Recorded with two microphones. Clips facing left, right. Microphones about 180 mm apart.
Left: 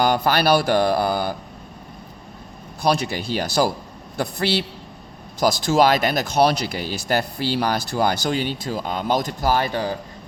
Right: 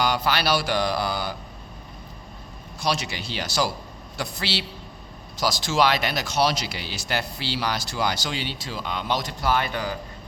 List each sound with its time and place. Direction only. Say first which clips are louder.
0.0 s speech: left 5 dB; 50° left (ahead or behind)
2.8 s speech: left 6 dB; 50° left (ahead or behind)
5.4 s speech: left 5 dB; 50° left (ahead or behind); by 10.0 s 30° left (ahead or behind)